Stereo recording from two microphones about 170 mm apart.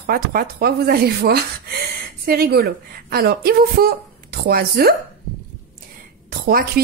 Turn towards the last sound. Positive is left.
turn(degrees=-60)  # may be behind; listen again after turning